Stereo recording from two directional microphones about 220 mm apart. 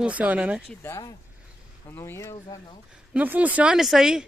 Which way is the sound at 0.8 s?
15° left (ahead or behind).